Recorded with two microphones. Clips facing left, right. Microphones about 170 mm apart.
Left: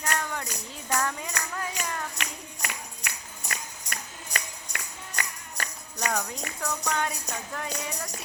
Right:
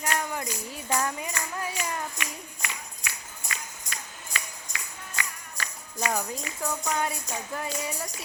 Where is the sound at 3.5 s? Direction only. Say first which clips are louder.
Left 2 dB; 55° left (ahead or behind).